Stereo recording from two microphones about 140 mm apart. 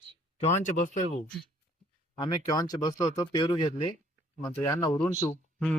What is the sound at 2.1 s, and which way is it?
Speech, 30° left (ahead or behind).